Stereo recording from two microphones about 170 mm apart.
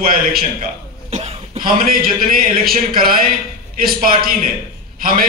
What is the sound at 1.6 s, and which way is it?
A man's voice, 55° right (ahead or behind).